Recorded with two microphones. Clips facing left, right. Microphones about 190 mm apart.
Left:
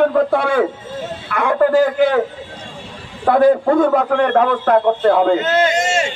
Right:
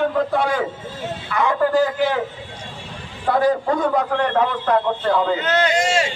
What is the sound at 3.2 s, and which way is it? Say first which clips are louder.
A man's voice: left 6 dB; 55° left (ahead or behind).